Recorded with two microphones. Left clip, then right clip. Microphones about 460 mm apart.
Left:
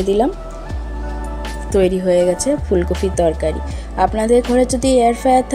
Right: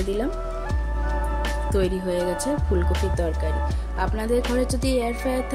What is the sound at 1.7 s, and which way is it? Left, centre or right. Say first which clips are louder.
Speech: left 12 dB; right.